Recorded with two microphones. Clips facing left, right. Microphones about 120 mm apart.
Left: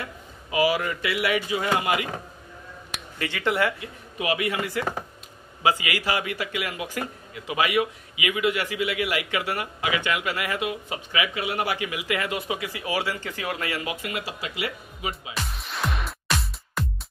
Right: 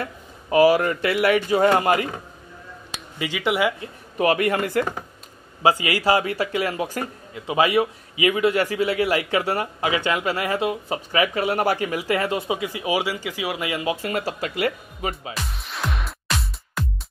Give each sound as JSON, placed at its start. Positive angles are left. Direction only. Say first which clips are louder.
{"t": 0.0, "sound": "speech", "louder": "right 5 dB", "side_deg": -45}
{"t": 3.2, "sound": "speech", "louder": "right 2 dB", "side_deg": -15}
{"t": 3.8, "sound": "speech", "louder": "right 8 dB", "side_deg": -45}
{"t": 5.6, "sound": "a man's voice", "louder": "right 4 dB", "side_deg": -30}
{"t": 14.0, "sound": "speech", "louder": "right 6 dB", "side_deg": -45}
{"t": 15.5, "sound": "music", "louder": "left 2 dB", "side_deg": 0}